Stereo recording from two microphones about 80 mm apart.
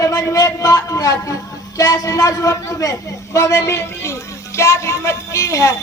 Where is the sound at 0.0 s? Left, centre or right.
Left.